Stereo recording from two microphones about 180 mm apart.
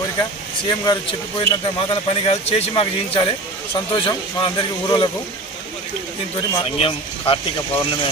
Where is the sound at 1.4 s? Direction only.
30° left (ahead or behind).